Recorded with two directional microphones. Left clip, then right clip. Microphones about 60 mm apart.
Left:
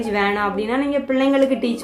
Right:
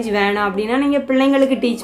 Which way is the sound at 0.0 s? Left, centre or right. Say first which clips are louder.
Right 2 dB; right.